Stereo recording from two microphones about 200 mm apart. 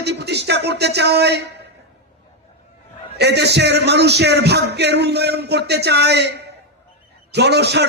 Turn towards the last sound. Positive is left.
turn(degrees=-55)  # may be behind; listen again after turning